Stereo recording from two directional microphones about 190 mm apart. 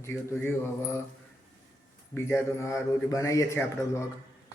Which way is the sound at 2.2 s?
15° left (ahead or behind).